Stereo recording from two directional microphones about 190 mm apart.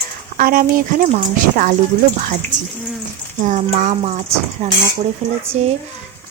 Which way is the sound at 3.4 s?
40° right (ahead or behind).